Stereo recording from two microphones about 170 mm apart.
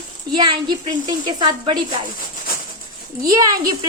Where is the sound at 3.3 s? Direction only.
20° right (ahead or behind).